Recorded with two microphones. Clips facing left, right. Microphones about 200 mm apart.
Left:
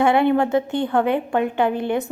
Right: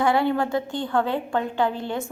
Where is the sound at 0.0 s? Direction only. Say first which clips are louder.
Left 4 dB; 20° left (ahead or behind).